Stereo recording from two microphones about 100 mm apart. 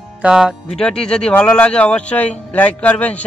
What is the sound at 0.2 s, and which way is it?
Speech, 5° right (ahead or behind).